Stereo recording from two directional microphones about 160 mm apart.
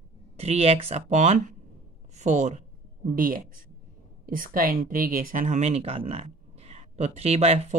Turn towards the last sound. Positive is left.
turn(degrees=-40)  # may be behind; listen again after turning